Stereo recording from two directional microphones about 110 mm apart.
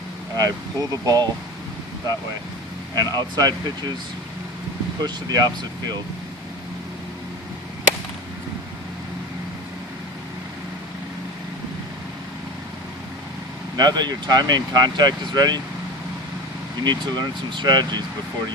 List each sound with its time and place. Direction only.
0.3 s speech: 35° right (ahead or behind)
2.9 s speech: 35° right (ahead or behind)
5.0 s speech: 35° right (ahead or behind)
13.7 s speech: 40° right (ahead or behind)
16.8 s speech: 40° right (ahead or behind)